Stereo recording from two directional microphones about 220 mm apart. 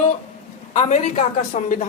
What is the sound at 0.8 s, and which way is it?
Speech, 35° left (ahead or behind).